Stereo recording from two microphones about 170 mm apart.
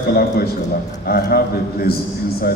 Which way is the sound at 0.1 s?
65° left (ahead or behind).